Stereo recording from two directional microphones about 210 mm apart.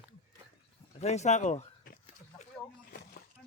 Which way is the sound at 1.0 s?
30° left (ahead or behind).